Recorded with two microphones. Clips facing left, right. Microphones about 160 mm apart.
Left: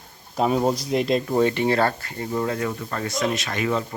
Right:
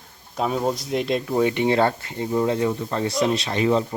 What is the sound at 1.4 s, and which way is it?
Speech, 15° right (ahead or behind).